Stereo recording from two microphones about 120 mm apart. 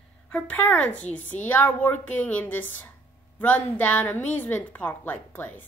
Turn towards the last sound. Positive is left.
turn(degrees=15)  # may be behind; listen again after turning